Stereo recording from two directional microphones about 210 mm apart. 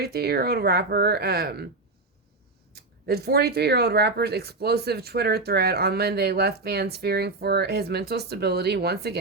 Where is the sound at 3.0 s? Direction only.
50° right (ahead or behind).